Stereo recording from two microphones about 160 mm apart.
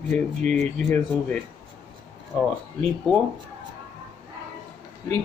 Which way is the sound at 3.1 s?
Centre (ahead or behind).